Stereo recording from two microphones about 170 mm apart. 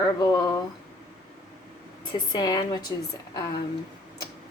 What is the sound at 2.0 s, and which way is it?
Speech, 25° left (ahead or behind).